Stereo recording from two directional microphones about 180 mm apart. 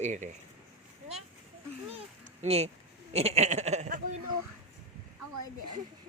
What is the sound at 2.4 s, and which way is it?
Speech, 35° right (ahead or behind).